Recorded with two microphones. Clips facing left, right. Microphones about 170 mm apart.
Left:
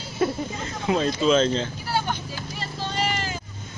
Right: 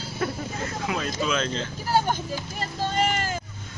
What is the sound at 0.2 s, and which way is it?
Snake, 25° left (ahead or behind).